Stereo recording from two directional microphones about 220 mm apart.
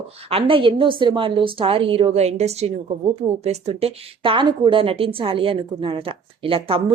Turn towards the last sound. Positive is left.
turn(degrees=-25)  # may be behind; listen again after turning